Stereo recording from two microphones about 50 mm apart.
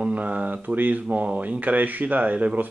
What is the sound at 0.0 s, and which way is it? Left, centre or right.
Speech, right.